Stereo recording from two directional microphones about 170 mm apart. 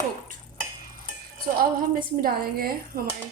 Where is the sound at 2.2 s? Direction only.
60° right (ahead or behind).